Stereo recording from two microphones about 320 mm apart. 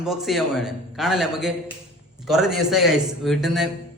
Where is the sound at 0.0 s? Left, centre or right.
Centre.